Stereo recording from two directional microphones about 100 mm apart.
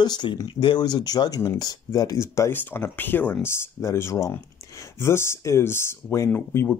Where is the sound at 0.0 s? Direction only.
45° left (ahead or behind).